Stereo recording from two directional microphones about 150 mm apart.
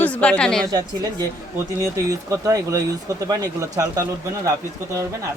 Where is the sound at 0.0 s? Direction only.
10° left (ahead or behind).